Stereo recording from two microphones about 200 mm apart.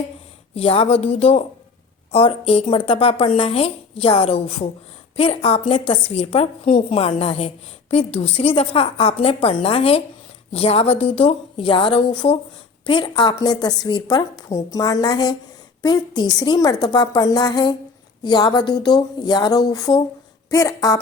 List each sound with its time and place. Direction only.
0.5 s a woman's voice: 30° left (ahead or behind)